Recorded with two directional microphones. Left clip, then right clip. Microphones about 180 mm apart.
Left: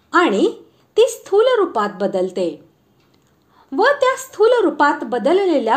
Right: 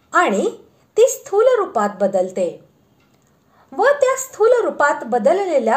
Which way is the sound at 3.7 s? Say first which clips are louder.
Even; 30° left (ahead or behind).